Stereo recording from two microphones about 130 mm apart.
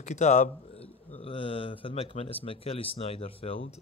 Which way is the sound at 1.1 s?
45° left (ahead or behind).